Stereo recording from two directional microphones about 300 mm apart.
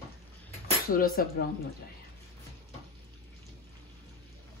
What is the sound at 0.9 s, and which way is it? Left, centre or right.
Speech, left.